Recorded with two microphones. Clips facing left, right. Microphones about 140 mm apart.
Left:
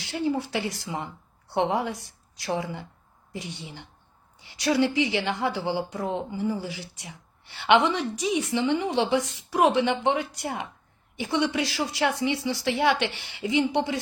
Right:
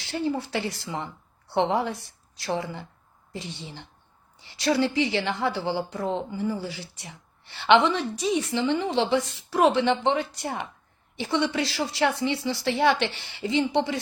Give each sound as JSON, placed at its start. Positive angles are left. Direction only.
{"t": 0.0, "sound": "a woman's voice", "side_deg": 15}